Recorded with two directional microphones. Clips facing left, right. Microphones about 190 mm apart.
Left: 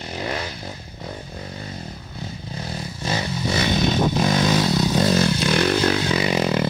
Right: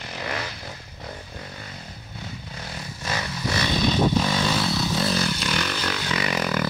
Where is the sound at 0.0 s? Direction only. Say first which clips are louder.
Left 4 dB; 30° left (ahead or behind).